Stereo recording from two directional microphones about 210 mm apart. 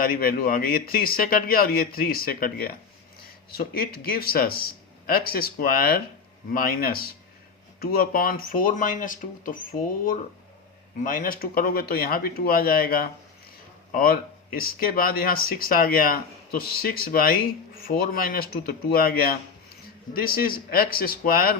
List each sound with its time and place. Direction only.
0.0 s a man's voice: 45° left (ahead or behind)